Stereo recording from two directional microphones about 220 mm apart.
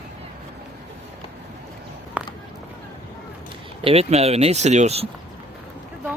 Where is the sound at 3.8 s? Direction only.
30° right (ahead or behind).